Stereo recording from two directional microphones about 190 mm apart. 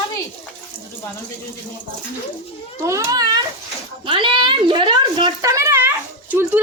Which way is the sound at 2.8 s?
20° right (ahead or behind).